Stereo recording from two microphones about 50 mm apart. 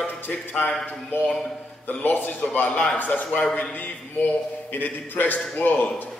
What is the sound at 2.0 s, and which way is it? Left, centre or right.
A man's voice, left.